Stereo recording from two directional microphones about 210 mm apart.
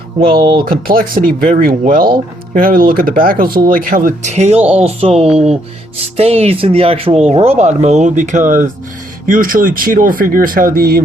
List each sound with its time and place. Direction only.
0.3 s speech: 20° right (ahead or behind)
0.6 s speech: 40° right (ahead or behind)